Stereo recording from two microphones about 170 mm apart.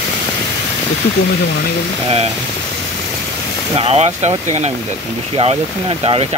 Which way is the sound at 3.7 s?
35° right (ahead or behind).